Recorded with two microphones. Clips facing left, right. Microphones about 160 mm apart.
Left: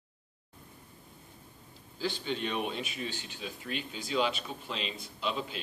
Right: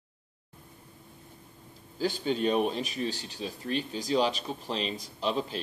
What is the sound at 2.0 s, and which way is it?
Speech, 40° right (ahead or behind).